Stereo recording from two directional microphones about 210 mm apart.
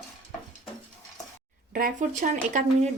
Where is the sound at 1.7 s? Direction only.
40° right (ahead or behind).